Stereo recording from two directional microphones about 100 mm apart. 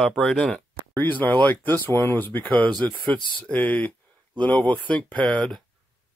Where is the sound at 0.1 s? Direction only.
5° left (ahead or behind).